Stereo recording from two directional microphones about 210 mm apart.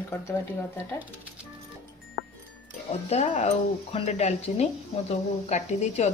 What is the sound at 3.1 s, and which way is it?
Speech, 30° left (ahead or behind).